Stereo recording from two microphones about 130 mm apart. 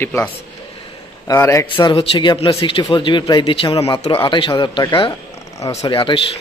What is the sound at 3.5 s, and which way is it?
Speech, 45° left (ahead or behind).